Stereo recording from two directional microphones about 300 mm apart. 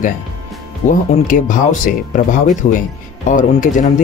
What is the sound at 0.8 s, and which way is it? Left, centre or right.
Speech, left.